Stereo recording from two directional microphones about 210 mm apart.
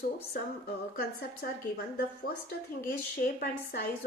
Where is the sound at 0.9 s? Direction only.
45° left (ahead or behind).